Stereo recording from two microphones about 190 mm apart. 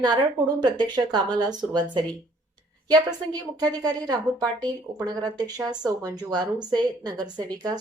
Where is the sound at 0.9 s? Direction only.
20° right (ahead or behind).